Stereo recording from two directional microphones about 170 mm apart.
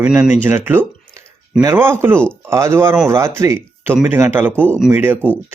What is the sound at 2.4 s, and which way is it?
Speech, 15° right (ahead or behind).